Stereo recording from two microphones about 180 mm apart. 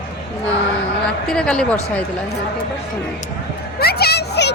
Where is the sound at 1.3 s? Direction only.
5° left (ahead or behind).